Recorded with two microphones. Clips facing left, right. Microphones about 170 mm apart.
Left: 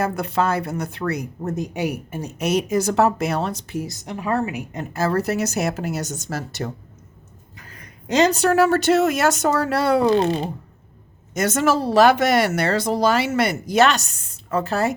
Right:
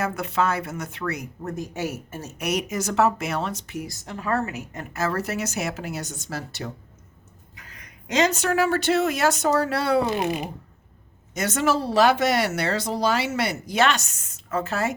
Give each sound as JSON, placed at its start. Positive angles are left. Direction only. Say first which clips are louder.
{"t": 0.0, "sound": "speech", "louder": "left 3 dB", "side_deg": 35}
{"t": 2.4, "sound": "speech", "louder": "left 6 dB", "side_deg": 30}
{"t": 3.8, "sound": "a woman's voice", "louder": "left 1 dB", "side_deg": 20}
{"t": 4.9, "sound": "speech", "louder": "left 5 dB", "side_deg": 35}
{"t": 7.5, "sound": "speech", "louder": "left 4 dB", "side_deg": 35}
{"t": 11.3, "sound": "speech", "louder": "left 4 dB", "side_deg": 45}